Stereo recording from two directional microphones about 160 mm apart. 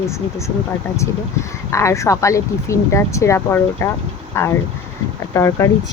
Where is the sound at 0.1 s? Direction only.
20° left (ahead or behind).